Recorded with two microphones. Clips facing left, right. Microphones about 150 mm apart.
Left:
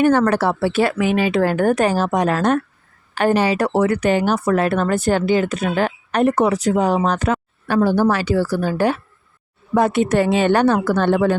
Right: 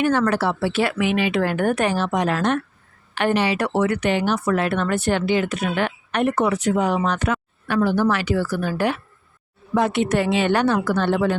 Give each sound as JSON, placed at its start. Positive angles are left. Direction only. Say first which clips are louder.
{"t": 0.0, "sound": "speech", "louder": "left 4 dB", "side_deg": 45}
{"t": 9.7, "sound": "speech", "louder": "left 4 dB", "side_deg": 45}